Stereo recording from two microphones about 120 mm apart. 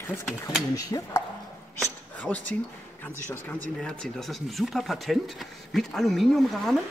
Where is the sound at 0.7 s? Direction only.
30° left (ahead or behind).